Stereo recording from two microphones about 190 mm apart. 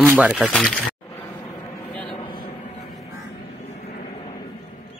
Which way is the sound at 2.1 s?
25° left (ahead or behind).